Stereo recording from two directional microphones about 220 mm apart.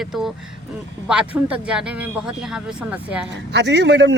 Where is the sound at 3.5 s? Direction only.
50° right (ahead or behind).